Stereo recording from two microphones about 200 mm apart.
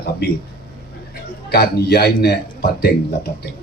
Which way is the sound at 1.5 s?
50° left (ahead or behind).